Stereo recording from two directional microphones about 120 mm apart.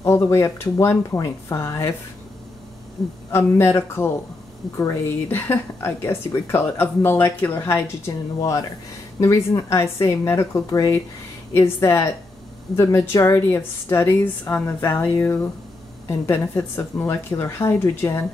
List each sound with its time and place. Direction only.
0.0 s speech: 20° left (ahead or behind)
3.3 s speech: 20° left (ahead or behind)
9.2 s speech: 25° left (ahead or behind)